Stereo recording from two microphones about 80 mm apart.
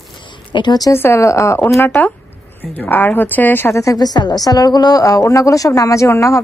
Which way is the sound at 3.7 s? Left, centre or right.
Left.